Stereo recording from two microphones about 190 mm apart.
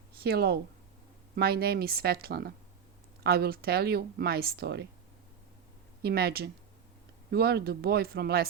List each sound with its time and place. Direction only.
0.2 s a woman's voice: 55° right (ahead or behind)
6.0 s a woman's voice: 55° right (ahead or behind)